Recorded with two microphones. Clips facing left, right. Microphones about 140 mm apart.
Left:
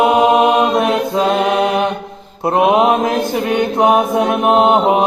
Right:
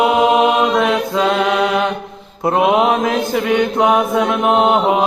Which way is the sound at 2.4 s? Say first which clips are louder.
Left 1 dB; 30° left (ahead or behind).